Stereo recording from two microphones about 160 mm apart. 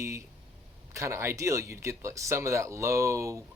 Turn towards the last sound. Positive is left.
turn(degrees=-20)  # may be behind; listen again after turning